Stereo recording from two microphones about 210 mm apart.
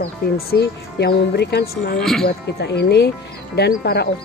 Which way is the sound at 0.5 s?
50° left (ahead or behind).